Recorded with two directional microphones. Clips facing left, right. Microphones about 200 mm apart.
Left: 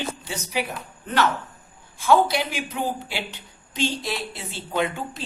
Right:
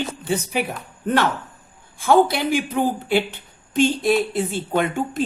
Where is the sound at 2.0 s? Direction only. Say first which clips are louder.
Right 3 dB; 55° right (ahead or behind).